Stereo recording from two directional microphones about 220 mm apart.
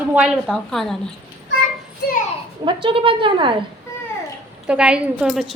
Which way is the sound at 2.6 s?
20° right (ahead or behind).